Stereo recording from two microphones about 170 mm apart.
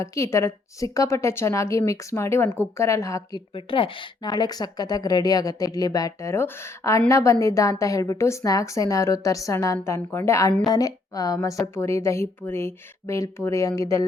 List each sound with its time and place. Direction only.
0.0 s a woman's voice: 15° left (ahead or behind)
3.5 s a woman's voice: 30° left (ahead or behind)